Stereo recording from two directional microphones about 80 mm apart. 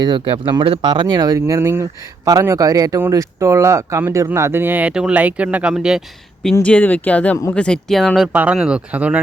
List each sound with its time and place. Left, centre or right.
0.0 s speech: right
1.0 s speech: right
1.5 s speech: right; by 6.0 s centre
6.4 s speech: centre
8.3 s speech: right